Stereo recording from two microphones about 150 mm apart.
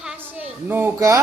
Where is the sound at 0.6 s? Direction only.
15° right (ahead or behind).